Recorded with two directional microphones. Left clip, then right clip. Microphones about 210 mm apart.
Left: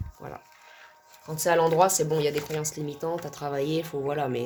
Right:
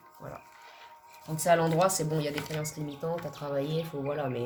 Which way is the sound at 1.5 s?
45° left (ahead or behind).